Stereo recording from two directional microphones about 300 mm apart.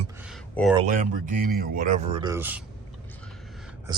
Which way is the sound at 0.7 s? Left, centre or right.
Right.